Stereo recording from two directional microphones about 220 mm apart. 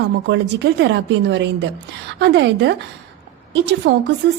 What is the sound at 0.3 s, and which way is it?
A woman's voice, 50° right (ahead or behind).